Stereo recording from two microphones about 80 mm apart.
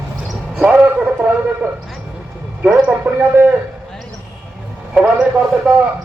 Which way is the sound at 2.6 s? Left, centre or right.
Centre.